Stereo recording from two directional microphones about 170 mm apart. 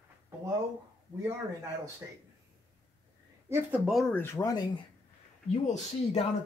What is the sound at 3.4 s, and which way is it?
Speech, 10° right (ahead or behind).